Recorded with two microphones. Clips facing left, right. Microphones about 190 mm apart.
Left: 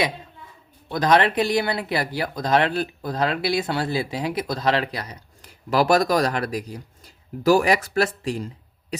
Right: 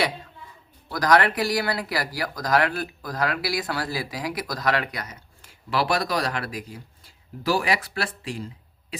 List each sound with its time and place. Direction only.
0.9 s speech: 25° left (ahead or behind); by 8.4 s 40° left (ahead or behind)